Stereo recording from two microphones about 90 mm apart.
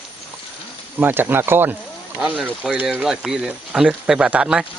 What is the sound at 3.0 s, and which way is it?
Speech, 5° right (ahead or behind).